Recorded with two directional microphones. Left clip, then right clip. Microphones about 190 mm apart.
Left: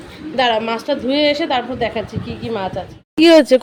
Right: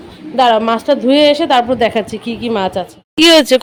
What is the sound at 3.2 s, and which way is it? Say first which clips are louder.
Speech: right 2 dB; 5° left (ahead or behind).